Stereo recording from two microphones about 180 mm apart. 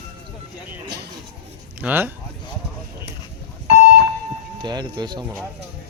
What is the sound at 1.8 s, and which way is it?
Speech, 10° right (ahead or behind).